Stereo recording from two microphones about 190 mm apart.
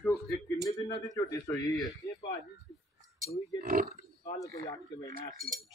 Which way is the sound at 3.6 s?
45° right (ahead or behind).